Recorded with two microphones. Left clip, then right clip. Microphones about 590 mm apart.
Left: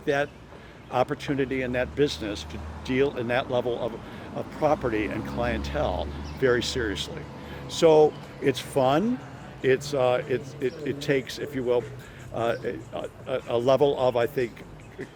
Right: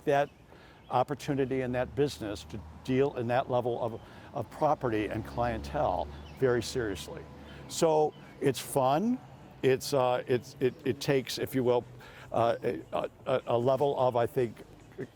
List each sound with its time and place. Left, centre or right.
0.0 s a man's voice: right